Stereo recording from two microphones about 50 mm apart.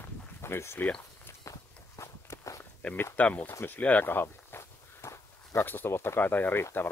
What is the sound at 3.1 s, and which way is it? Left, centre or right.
Speech, left.